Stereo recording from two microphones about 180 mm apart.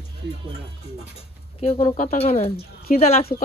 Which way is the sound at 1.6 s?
35° left (ahead or behind).